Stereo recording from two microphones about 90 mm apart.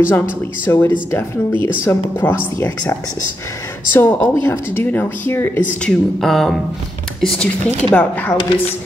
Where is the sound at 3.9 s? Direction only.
20° left (ahead or behind).